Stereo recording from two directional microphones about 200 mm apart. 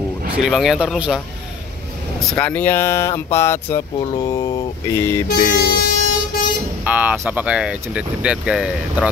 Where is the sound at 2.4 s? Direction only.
10° left (ahead or behind).